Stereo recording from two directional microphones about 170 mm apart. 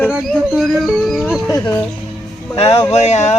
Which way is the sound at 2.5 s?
35° left (ahead or behind).